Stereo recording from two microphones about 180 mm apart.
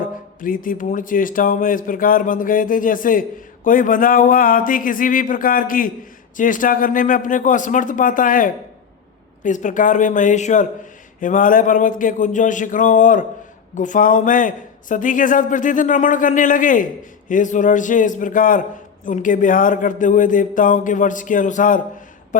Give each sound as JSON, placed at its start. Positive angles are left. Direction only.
{"t": 0.4, "sound": "speech", "side_deg": 50}